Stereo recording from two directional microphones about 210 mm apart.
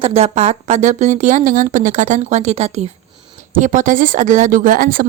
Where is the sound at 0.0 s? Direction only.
30° right (ahead or behind).